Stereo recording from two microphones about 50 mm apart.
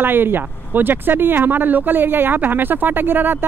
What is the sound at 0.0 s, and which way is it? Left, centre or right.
Speech, right.